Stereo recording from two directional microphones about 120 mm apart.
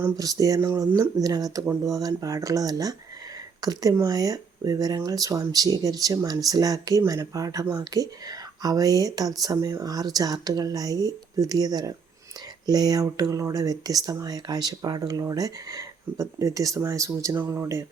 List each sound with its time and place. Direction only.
0.0 s speech: 30° right (ahead or behind)